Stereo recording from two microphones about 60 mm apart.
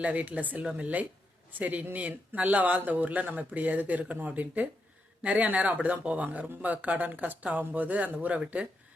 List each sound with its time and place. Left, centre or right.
0.0 s speech: right